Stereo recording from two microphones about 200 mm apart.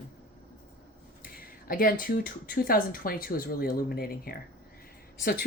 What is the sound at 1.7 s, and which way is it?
Speech, 45° left (ahead or behind).